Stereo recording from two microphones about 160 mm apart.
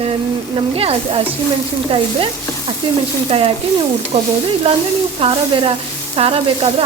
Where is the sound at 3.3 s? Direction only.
40° right (ahead or behind).